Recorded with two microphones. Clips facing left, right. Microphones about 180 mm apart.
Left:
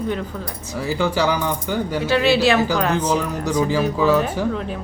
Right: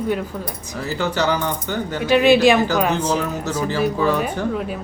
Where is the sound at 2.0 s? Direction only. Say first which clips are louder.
Right 4 dB; 15° right (ahead or behind).